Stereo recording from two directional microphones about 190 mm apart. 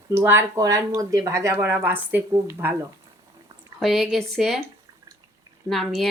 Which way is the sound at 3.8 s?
Centre (ahead or behind).